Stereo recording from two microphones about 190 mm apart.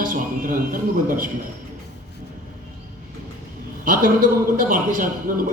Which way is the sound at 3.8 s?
45° right (ahead or behind).